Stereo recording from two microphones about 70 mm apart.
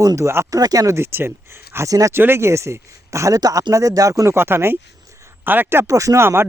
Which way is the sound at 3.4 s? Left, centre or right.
Right.